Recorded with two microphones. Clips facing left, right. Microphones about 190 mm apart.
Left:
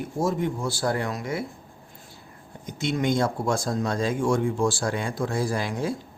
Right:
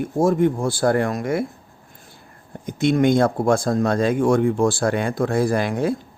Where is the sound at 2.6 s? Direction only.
55° right (ahead or behind).